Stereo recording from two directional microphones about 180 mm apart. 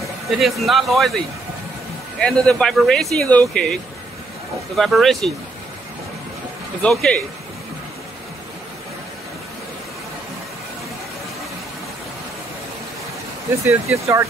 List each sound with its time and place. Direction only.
0.0 s speech: centre (ahead or behind)
2.1 s speech: 5° left (ahead or behind)
4.7 s speech: centre (ahead or behind)
6.8 s speech: 5° left (ahead or behind)
13.7 s speech: 15° right (ahead or behind)